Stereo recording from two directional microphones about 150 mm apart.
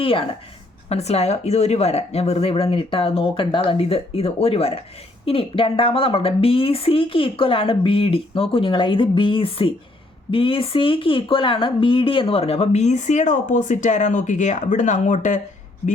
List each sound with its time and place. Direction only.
0.0 s a woman's voice: 35° left (ahead or behind); by 15.4 s 55° left (ahead or behind)